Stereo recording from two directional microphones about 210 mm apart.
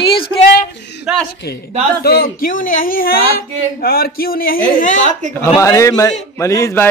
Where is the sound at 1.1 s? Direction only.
Centre (ahead or behind).